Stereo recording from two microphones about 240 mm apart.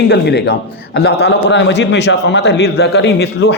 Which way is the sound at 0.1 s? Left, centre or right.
Left.